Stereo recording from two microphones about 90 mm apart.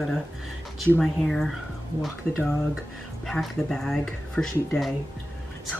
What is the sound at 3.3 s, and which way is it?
Speech, centre (ahead or behind).